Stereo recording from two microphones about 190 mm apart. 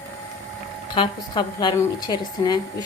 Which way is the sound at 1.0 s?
25° left (ahead or behind).